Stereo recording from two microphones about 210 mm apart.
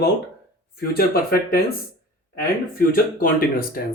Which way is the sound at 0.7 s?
50° left (ahead or behind).